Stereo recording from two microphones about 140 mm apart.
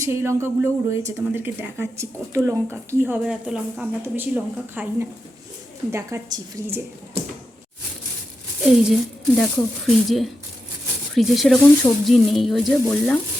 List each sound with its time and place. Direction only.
0.0 s speech: 20° right (ahead or behind)
3.2 s a woman's voice: 5° right (ahead or behind)
8.8 s speech: centre (ahead or behind)